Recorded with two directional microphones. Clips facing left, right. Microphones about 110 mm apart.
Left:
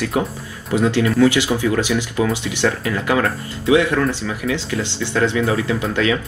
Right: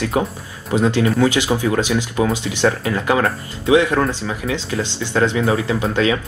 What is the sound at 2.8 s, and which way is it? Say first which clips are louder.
Speech: right 1 dB; 30° right (ahead or behind).